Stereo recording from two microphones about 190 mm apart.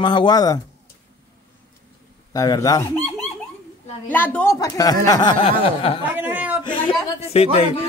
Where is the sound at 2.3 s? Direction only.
20° left (ahead or behind).